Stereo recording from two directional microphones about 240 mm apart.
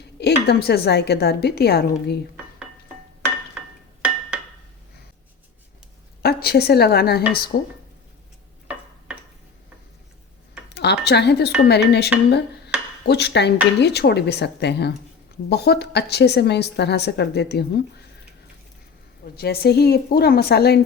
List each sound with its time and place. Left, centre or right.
0.2 s a woman's voice: left
6.2 s a woman's voice: left
10.8 s a woman's voice: left
19.4 s a woman's voice: left